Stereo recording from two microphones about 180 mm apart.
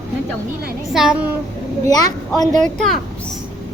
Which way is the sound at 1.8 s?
20° left (ahead or behind).